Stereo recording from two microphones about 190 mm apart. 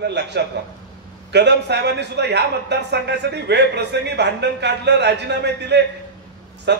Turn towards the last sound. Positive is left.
turn(degrees=-65)  # may be behind; listen again after turning